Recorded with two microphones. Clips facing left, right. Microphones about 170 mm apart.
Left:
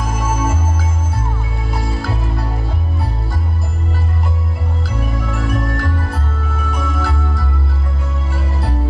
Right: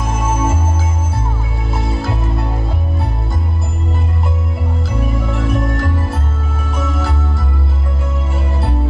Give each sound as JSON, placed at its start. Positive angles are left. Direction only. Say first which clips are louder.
{"t": 0.0, "sound": "music", "louder": "right 2 dB", "side_deg": -25}
{"t": 1.7, "sound": "music", "louder": "right 2 dB", "side_deg": -25}
{"t": 5.2, "sound": "music", "louder": "right 1 dB", "side_deg": -25}